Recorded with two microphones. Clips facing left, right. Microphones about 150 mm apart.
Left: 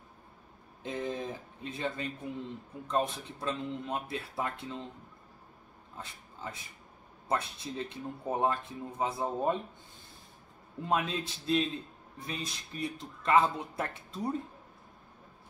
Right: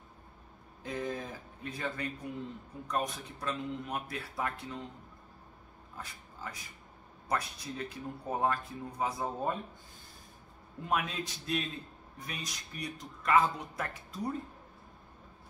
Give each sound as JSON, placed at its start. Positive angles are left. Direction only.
{"t": 0.8, "sound": "a sound", "side_deg": 25}
{"t": 2.9, "sound": "speech", "side_deg": 25}
{"t": 5.9, "sound": "speech", "side_deg": 25}
{"t": 10.9, "sound": "speech", "side_deg": 25}